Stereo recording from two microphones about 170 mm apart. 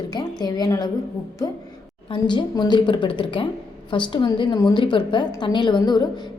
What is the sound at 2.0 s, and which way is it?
A woman's voice, 25° left (ahead or behind).